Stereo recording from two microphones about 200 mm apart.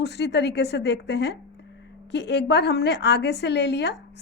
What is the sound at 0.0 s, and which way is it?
A woman's voice, 55° left (ahead or behind).